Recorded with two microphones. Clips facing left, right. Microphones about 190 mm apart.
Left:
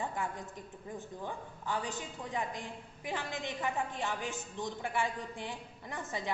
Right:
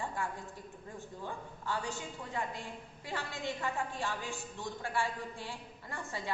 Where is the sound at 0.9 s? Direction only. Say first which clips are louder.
Left 2 dB; 20° left (ahead or behind).